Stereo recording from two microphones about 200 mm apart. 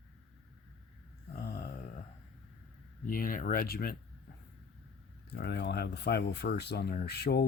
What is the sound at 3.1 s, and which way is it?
Speech, 45° left (ahead or behind).